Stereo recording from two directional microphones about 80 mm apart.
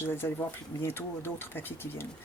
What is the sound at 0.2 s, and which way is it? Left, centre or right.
Speech, left.